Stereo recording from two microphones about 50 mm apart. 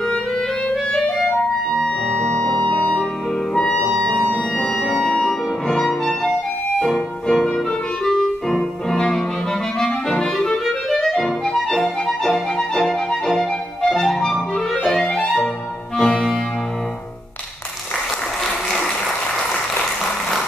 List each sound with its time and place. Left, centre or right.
0.9 s clarinet: centre
1.8 s music: centre
3.5 s clarinet: centre
4.9 s music: centre
13.9 s clarinet: centre
16.0 s music: centre